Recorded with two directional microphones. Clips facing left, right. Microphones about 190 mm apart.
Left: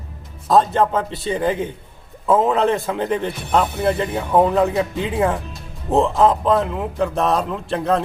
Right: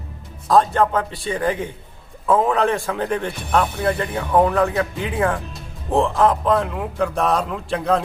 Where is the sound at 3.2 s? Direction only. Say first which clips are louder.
Left 1 dB; 10° left (ahead or behind).